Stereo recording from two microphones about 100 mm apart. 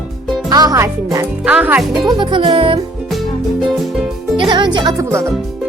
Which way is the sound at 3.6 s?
Centre (ahead or behind).